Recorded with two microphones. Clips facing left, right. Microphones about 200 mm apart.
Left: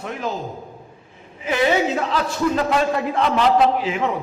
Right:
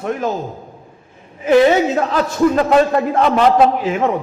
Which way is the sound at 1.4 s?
50° right (ahead or behind).